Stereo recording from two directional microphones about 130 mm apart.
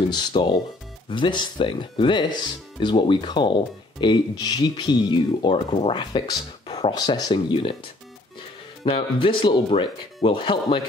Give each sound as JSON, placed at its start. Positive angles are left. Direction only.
{"t": 0.1, "sound": "speech", "side_deg": 35}
{"t": 8.8, "sound": "speech", "side_deg": 45}